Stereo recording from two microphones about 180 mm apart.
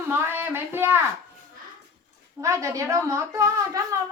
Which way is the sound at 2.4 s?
15° right (ahead or behind).